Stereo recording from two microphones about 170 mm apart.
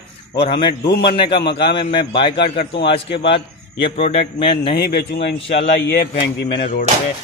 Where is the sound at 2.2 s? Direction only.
80° left.